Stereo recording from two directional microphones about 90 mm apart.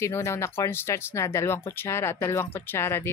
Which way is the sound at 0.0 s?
30° left (ahead or behind).